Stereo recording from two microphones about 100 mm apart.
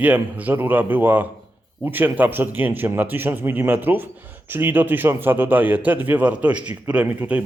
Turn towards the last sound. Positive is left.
turn(degrees=-15)  # may be behind; listen again after turning